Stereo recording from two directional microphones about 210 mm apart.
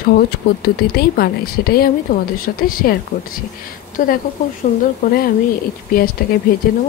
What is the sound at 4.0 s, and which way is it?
A woman's voice, 40° left (ahead or behind).